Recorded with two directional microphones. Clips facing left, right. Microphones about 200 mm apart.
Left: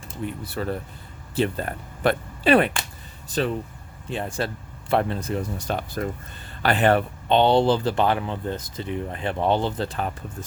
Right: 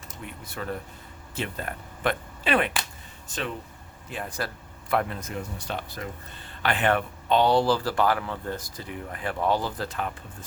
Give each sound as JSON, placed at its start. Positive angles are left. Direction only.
{"t": 0.1, "sound": "speech", "side_deg": 35}